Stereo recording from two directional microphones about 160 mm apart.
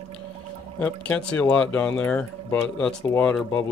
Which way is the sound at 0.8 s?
10° left (ahead or behind).